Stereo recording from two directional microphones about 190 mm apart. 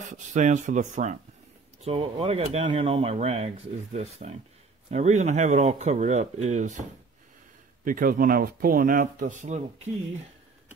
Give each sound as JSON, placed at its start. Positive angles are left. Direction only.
{"t": 0.0, "sound": "speech", "side_deg": -40}